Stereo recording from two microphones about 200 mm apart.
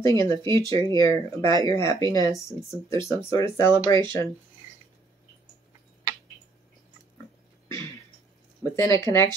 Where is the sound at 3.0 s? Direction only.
15° left (ahead or behind).